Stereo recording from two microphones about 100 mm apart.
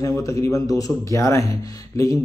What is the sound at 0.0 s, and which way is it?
A man's voice, 35° left (ahead or behind).